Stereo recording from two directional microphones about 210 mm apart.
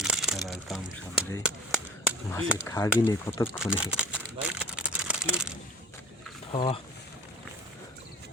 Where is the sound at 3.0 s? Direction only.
10° left (ahead or behind).